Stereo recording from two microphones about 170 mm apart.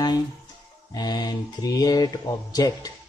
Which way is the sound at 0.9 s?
25° left (ahead or behind).